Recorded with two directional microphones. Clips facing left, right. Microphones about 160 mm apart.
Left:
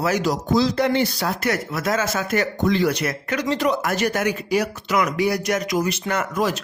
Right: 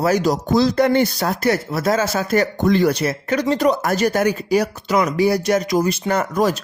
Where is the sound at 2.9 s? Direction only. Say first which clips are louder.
Right 4 dB; 30° right (ahead or behind).